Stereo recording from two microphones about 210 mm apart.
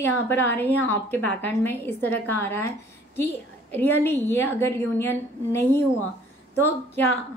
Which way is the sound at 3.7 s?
10° left (ahead or behind).